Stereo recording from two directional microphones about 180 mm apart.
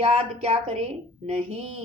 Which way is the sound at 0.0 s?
35° right (ahead or behind).